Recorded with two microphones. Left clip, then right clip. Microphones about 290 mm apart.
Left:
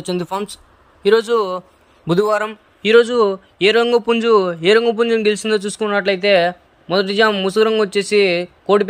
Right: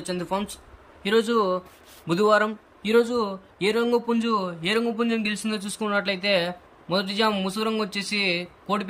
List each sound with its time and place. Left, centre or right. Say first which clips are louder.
0.0 s speech: left 6 dB; left
2.8 s a man's voice: left 10 dB; centre